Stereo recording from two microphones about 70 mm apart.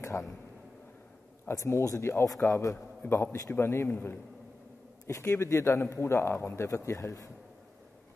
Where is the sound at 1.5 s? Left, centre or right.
Left.